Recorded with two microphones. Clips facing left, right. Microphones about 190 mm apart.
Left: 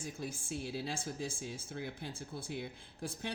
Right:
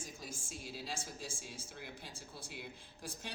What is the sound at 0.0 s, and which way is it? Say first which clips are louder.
A woman's voice: left 6 dB; 60° left (ahead or behind).